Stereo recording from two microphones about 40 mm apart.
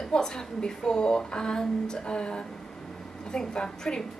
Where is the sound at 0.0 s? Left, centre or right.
Centre.